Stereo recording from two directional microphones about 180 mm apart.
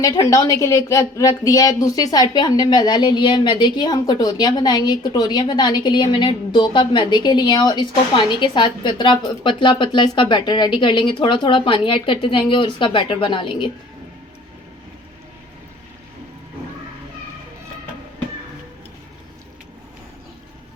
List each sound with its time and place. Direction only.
0.0 s a woman's voice: 20° left (ahead or behind)